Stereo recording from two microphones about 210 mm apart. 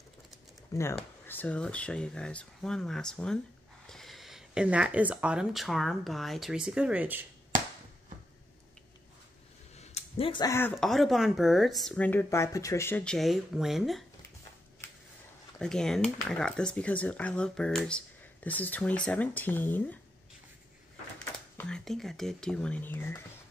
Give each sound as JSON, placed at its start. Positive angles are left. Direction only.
{"t": 0.9, "sound": "speech", "side_deg": 10}
{"t": 9.8, "sound": "a sound", "side_deg": 30}
{"t": 10.7, "sound": "speech", "side_deg": 0}
{"t": 15.6, "sound": "speech", "side_deg": 0}
{"t": 21.5, "sound": "speech", "side_deg": 5}